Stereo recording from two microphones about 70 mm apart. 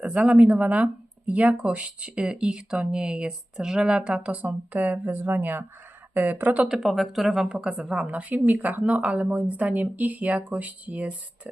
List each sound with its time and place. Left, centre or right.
0.0 s a woman's voice: centre
6.6 s speech: centre
7.4 s a woman's voice: centre